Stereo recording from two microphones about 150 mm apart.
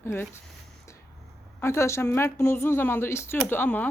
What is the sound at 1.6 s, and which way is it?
Speech, 20° left (ahead or behind).